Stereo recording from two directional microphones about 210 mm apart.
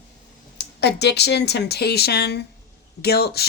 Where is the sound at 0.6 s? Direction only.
50° left (ahead or behind).